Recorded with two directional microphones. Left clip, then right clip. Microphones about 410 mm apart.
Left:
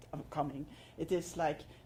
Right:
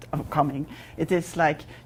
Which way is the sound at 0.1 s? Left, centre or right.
Right.